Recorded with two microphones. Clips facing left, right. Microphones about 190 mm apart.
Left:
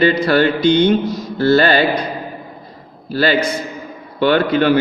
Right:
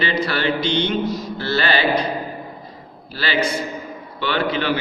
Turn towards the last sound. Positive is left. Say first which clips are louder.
# left 8 dB
turn(degrees=50)  # may be behind; listen again after turning